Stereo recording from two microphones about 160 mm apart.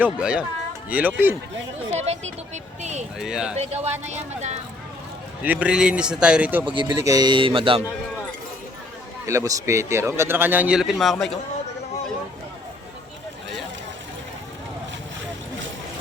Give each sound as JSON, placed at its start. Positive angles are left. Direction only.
{"t": 0.0, "sound": "a man's voice", "side_deg": -5}
{"t": 1.9, "sound": "speech", "side_deg": -40}
{"t": 3.2, "sound": "speech", "side_deg": -5}
{"t": 3.5, "sound": "speech", "side_deg": -45}
{"t": 5.4, "sound": "a man's voice", "side_deg": -10}
{"t": 6.7, "sound": "speech", "side_deg": -30}
{"t": 9.2, "sound": "a man's voice", "side_deg": -20}